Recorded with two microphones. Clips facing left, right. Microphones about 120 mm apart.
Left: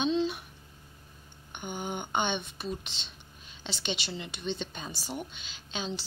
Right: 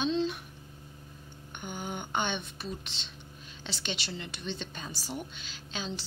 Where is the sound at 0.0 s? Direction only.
5° left (ahead or behind).